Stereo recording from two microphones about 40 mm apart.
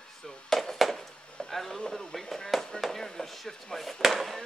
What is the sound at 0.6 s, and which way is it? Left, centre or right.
Speech, centre.